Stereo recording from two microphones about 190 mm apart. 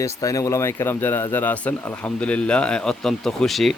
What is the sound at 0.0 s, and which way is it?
Speech, 20° left (ahead or behind).